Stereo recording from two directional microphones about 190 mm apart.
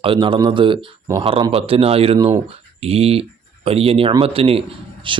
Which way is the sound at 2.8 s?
30° right (ahead or behind).